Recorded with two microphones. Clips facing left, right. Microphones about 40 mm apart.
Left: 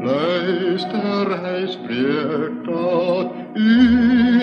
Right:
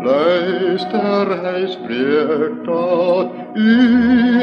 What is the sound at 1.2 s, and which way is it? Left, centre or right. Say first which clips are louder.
Music: right 3 dB; centre.